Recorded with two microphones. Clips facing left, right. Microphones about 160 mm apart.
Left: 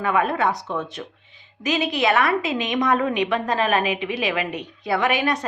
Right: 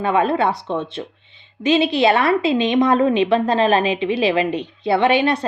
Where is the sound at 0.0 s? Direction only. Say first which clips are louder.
Right 4 dB; 30° right (ahead or behind).